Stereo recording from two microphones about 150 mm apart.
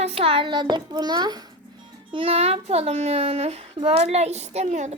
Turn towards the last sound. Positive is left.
turn(degrees=-50)  # may be behind; listen again after turning